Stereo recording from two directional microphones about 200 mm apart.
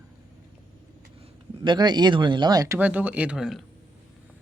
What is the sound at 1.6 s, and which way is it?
Speech, 20° right (ahead or behind).